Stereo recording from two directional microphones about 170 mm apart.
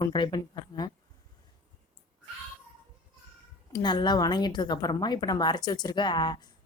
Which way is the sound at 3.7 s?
25° left (ahead or behind).